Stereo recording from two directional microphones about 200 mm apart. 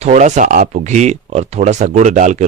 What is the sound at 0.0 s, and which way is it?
Speech, 35° right (ahead or behind).